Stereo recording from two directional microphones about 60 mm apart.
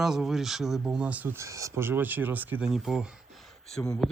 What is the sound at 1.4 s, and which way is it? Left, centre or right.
Speech, right.